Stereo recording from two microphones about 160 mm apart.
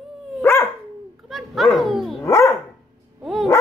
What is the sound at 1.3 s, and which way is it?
Dog, centre (ahead or behind).